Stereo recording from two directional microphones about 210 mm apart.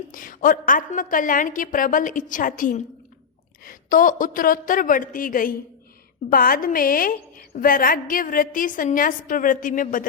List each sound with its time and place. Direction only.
0.1 s a woman's voice: 40° left (ahead or behind)